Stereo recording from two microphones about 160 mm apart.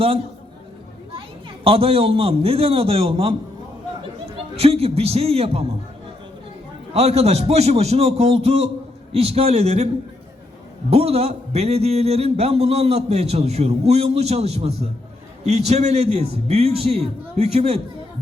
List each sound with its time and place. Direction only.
1.6 s a man's voice: 35° right (ahead or behind)
6.9 s a man's voice: 40° right (ahead or behind)